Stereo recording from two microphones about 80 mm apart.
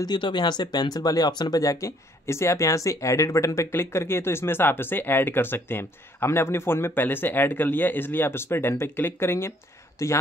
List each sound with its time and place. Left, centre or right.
0.0 s speech: left